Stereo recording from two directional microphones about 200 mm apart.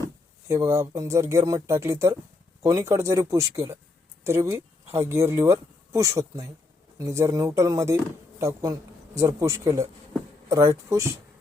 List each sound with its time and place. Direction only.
0.4 s a man's voice: 15° right (ahead or behind)